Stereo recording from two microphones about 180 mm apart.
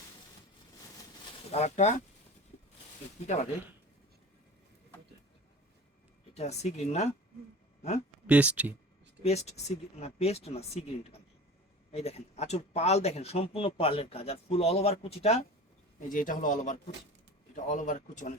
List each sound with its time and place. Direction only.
1.5 s speech: 35° left (ahead or behind)
6.3 s speech: 40° left (ahead or behind)
8.3 s speech: 10° right (ahead or behind)
9.2 s speech: 35° left (ahead or behind)
16.0 s a man's voice: 50° left (ahead or behind)